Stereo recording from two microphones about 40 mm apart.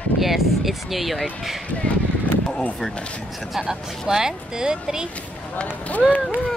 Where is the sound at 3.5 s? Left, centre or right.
Centre.